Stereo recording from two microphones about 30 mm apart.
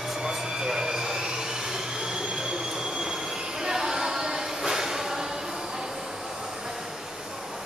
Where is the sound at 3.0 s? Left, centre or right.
Centre.